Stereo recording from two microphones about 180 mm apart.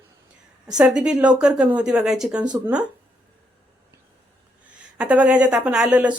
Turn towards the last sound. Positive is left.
turn(degrees=-5)  # may be behind; listen again after turning